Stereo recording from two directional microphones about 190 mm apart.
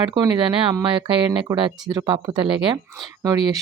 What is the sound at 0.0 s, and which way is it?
Speech, 20° right (ahead or behind).